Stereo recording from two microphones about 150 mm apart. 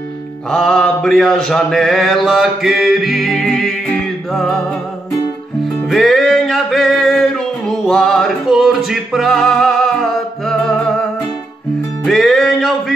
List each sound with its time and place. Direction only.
0.5 s mantra: 5° left (ahead or behind)
5.9 s music: centre (ahead or behind)
12.0 s music: centre (ahead or behind)